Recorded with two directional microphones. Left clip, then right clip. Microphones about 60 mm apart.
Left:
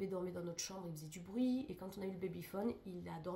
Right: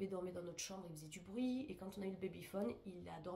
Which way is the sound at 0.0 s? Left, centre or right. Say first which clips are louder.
Left 3 dB; left.